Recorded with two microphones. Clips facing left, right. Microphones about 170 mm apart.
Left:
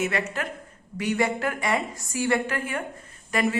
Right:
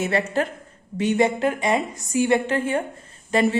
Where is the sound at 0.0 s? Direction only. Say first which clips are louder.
Right 5 dB; 30° right (ahead or behind).